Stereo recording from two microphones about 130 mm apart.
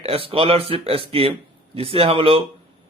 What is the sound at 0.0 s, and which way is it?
Speech, 45° right (ahead or behind).